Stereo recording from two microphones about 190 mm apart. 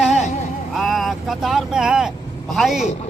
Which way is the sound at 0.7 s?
Centre (ahead or behind).